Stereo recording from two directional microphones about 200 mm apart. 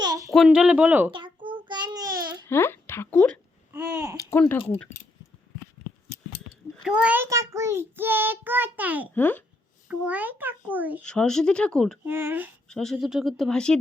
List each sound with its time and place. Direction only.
0.0 s a sound: 20° right (ahead or behind)
0.3 s speech: 5° right (ahead or behind)
1.1 s child singing: 25° right (ahead or behind)
2.5 s a woman's voice: 10° left (ahead or behind)
3.7 s a sound: 10° right (ahead or behind)
4.2 s speech: 10° left (ahead or behind)
4.5 s speech: 25° left (ahead or behind)
6.8 s child singing: 5° right (ahead or behind)
9.1 s a child's voice: 10° left (ahead or behind)
9.9 s child singing: 5° right (ahead or behind)
11.0 s speech: 5° left (ahead or behind)
12.0 s child singing: 10° right (ahead or behind)
12.6 s speech: 5° left (ahead or behind)